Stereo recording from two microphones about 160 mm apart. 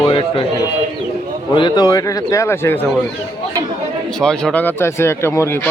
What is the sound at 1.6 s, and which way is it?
Speech, 25° left (ahead or behind).